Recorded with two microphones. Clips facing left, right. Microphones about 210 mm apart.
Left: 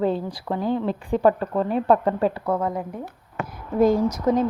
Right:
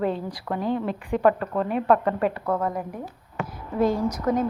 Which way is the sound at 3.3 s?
45° left (ahead or behind).